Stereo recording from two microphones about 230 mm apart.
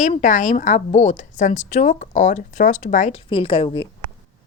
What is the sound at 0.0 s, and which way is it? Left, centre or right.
A woman's voice, left.